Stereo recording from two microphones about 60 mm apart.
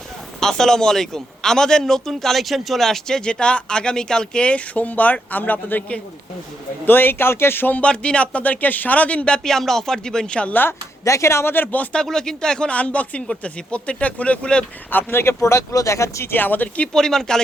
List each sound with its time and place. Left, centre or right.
0.3 s a man's voice: centre; by 7.8 s left
7.8 s a man's voice: centre
10.5 s speech: left
11.0 s speech: left
11.5 s speech: left
12.0 s a man's voice: centre
14.8 s speech: left
15.2 s speech: left
16.3 s speech: left
16.8 s a man's voice: centre